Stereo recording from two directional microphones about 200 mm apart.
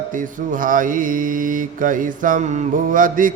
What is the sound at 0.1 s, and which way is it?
Mantra, 40° right (ahead or behind).